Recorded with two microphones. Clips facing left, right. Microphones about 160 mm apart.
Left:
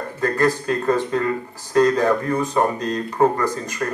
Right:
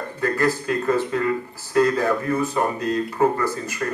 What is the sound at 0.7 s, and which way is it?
Speech, 35° left (ahead or behind).